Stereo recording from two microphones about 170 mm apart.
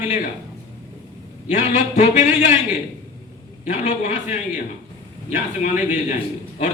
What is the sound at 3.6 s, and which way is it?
Speech, 45° left (ahead or behind).